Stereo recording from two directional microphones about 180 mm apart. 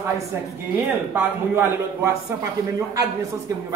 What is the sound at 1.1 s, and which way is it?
A man's voice, 10° right (ahead or behind).